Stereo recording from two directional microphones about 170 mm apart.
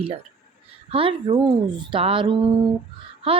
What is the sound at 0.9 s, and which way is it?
Speech, 30° right (ahead or behind).